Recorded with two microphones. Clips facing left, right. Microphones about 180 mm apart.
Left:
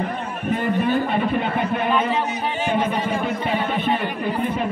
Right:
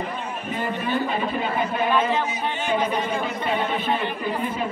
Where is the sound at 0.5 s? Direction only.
55° left (ahead or behind).